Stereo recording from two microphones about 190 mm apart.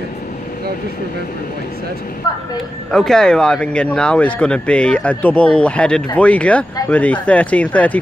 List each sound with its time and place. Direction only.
2.9 s speech: centre (ahead or behind)